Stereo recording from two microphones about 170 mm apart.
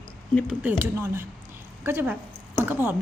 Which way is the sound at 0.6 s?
10° right (ahead or behind).